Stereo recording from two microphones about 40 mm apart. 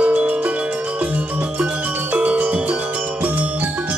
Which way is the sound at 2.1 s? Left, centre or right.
Right.